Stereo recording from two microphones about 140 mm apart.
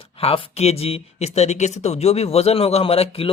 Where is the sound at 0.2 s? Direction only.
45° left (ahead or behind).